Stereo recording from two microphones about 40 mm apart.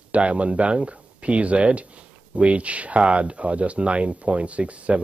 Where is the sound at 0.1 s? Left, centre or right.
Right.